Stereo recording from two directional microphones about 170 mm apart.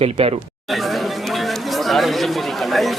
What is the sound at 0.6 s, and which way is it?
Chatter, centre (ahead or behind).